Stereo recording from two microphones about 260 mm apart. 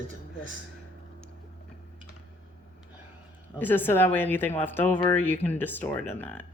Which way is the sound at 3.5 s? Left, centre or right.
Centre.